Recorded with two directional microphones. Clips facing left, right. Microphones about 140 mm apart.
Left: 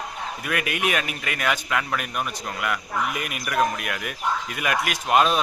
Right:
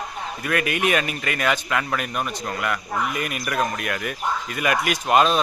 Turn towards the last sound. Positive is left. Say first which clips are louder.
# right 2 dB
turn(degrees=5)  # may be behind; listen again after turning